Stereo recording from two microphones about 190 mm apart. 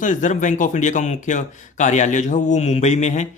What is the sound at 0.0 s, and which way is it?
Speech, 40° left (ahead or behind).